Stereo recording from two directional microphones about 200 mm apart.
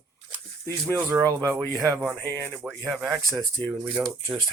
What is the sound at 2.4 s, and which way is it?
Speech, 10° right (ahead or behind).